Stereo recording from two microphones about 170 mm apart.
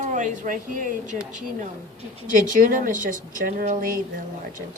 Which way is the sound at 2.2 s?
50° right (ahead or behind).